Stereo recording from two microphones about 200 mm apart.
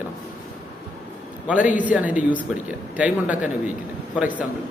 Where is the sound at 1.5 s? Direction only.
5° right (ahead or behind).